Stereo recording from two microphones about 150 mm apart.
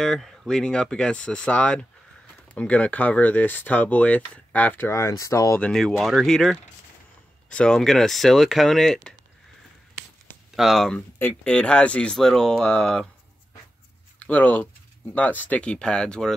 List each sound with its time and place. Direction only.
0.0 s speech: centre (ahead or behind); by 5.6 s 20° left (ahead or behind)
5.6 s speech: 5° left (ahead or behind)
10.5 s speech: centre (ahead or behind)
14.2 s speech: 10° left (ahead or behind)